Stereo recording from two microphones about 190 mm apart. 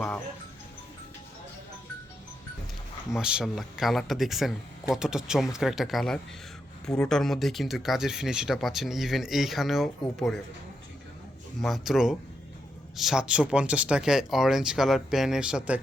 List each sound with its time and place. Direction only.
3.1 s speech: 5° right (ahead or behind)
11.6 s speech: centre (ahead or behind)